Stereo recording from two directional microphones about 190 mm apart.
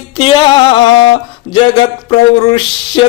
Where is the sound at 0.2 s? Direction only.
30° left (ahead or behind).